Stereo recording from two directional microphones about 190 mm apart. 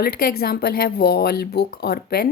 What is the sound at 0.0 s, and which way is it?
Speech, 55° left (ahead or behind).